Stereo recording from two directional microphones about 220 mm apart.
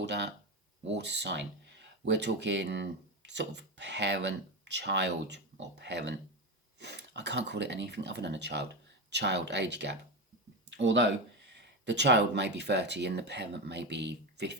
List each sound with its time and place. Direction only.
0.0 s speech: 50° right (ahead or behind)